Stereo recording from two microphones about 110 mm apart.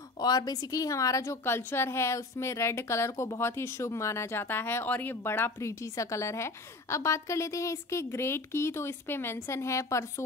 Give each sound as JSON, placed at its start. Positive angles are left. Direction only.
{"t": 0.2, "sound": "a woman's voice", "side_deg": 35}